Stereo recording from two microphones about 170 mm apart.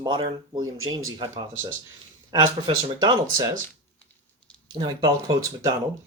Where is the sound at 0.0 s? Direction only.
30° right (ahead or behind).